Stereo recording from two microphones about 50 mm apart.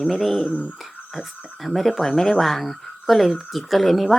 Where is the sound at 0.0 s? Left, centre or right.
Centre.